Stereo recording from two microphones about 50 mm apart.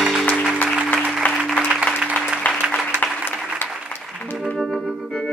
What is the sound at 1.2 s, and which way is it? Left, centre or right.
Music, left.